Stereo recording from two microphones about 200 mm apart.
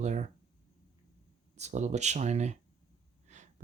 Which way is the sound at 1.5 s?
35° right (ahead or behind).